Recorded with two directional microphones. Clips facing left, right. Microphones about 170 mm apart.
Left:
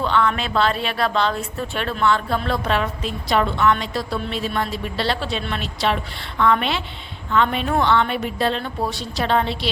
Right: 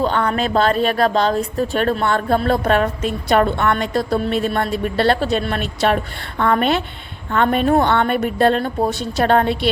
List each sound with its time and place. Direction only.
0.0 s a woman's voice: 40° right (ahead or behind)